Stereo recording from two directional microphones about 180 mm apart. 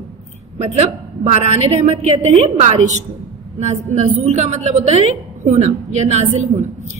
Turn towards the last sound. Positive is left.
turn(degrees=-45)  # may be behind; listen again after turning